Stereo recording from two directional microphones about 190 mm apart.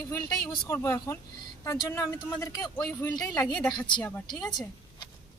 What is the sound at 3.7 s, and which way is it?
Speech, 25° left (ahead or behind).